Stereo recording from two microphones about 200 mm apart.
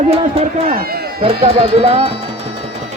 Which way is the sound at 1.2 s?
30° right (ahead or behind).